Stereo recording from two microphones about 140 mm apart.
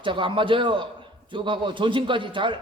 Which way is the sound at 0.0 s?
35° right (ahead or behind).